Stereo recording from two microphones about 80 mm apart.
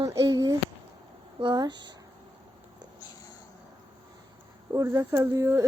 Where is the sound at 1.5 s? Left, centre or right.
Right.